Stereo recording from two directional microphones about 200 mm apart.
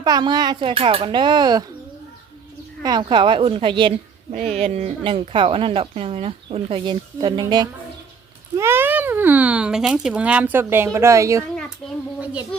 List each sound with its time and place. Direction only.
0.0 s speech: 20° right (ahead or behind)
2.8 s speech: 20° right (ahead or behind)
4.3 s speech: 35° right (ahead or behind); by 11.4 s 15° right (ahead or behind)
12.2 s a sound: 5° right (ahead or behind)